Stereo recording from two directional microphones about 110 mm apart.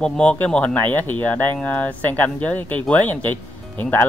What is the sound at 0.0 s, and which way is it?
Speech, 10° left (ahead or behind).